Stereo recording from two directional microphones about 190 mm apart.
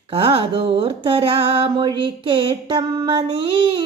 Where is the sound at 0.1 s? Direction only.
30° right (ahead or behind).